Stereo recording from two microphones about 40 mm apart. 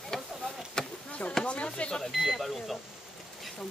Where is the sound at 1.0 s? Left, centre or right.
Left.